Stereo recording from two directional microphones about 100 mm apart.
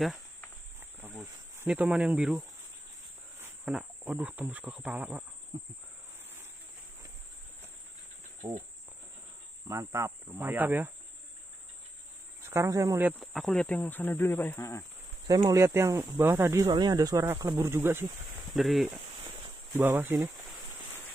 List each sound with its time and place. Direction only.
0.7 s insect: 20° right (ahead or behind)
1.8 s speech: 10° right (ahead or behind)
3.6 s cricket: 5° right (ahead or behind)
4.1 s speech: 15° right (ahead or behind)
5.5 s cricket: 65° right (ahead or behind)
8.4 s speech: 30° right (ahead or behind)
9.7 s speech: 30° right (ahead or behind)
12.4 s speech: 25° right (ahead or behind)
13.2 s speech: centre (ahead or behind)
13.7 s speech: 20° left (ahead or behind)
15.2 s speech: 40° right (ahead or behind)
16.6 s speech: 40° right (ahead or behind); by 18.1 s 25° right (ahead or behind)
18.5 s speech: centre (ahead or behind)
19.7 s speech: 20° right (ahead or behind)